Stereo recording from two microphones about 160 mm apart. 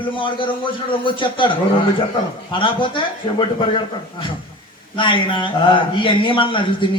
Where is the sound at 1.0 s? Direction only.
30° left (ahead or behind).